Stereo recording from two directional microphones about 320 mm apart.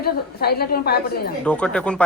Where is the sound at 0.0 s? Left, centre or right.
Left.